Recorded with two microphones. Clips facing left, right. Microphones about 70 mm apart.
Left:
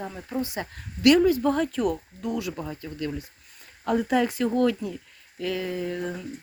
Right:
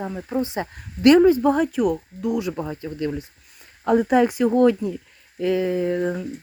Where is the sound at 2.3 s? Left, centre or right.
Right.